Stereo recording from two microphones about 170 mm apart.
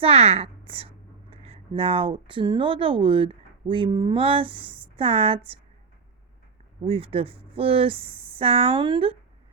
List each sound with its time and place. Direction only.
0.0 s speech: 35° right (ahead or behind)
6.8 s speech: 30° right (ahead or behind)